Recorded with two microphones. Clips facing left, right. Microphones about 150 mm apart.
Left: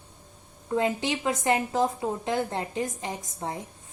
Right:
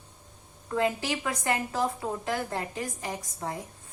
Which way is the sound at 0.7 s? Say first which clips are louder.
Left 2 dB; 20° left (ahead or behind).